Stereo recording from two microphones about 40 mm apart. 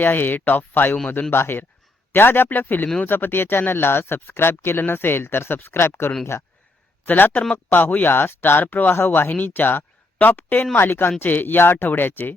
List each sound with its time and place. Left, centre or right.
0.0 s speech: left
1.3 s speech: left
2.1 s speech: left
7.0 s speech: left
10.8 s speech: left
11.2 s speech: left
11.9 s speech: left